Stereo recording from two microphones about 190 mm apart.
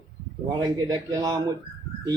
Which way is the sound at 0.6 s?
20° right (ahead or behind).